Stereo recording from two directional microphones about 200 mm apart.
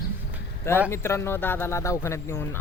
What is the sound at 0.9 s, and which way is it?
Speech, 15° left (ahead or behind).